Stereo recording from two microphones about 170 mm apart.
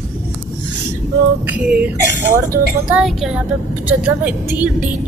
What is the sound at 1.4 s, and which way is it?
A woman's voice, 5° right (ahead or behind).